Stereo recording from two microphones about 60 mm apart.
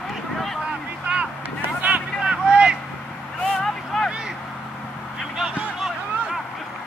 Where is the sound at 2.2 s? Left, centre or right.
Centre.